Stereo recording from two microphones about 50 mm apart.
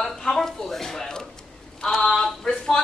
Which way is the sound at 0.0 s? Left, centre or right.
Centre.